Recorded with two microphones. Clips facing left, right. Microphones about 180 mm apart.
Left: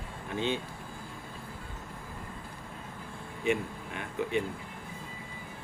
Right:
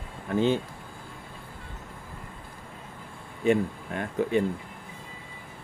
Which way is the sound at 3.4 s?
45° right (ahead or behind).